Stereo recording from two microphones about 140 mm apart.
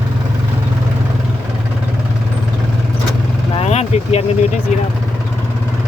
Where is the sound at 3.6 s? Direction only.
50° left (ahead or behind).